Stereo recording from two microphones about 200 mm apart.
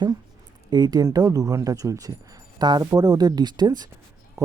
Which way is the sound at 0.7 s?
20° right (ahead or behind).